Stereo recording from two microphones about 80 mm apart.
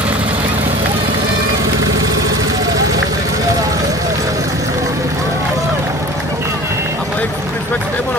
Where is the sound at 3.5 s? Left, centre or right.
Right.